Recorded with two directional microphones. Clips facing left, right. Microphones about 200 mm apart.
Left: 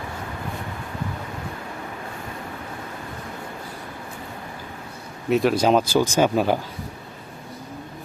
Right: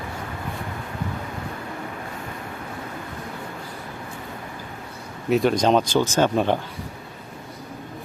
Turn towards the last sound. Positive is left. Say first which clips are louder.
# left 1 dB
turn(degrees=5)  # may be behind; listen again after turning